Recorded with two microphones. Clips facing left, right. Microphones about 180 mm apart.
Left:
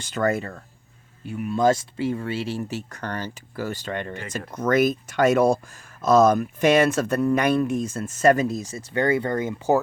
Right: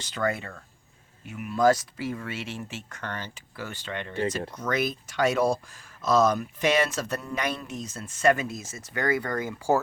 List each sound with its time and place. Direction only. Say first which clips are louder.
0.0 s speech: left 5 dB; 45° left (ahead or behind); by 9.8 s 20° left (ahead or behind)